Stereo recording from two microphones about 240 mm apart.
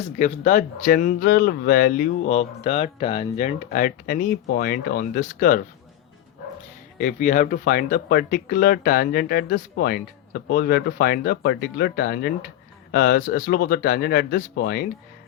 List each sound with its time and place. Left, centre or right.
0.2 s speech: left
7.0 s speech: left